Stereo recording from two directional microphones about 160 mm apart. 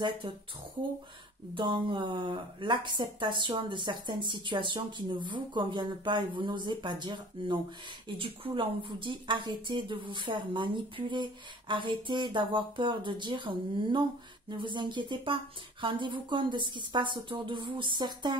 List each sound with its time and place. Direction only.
1.5 s a woman's voice: 30° right (ahead or behind)